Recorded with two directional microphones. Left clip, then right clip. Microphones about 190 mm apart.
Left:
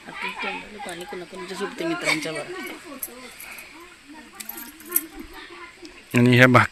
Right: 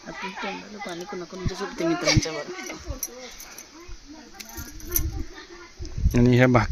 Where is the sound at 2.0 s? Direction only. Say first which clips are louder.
Left 1 dB; 65° right (ahead or behind).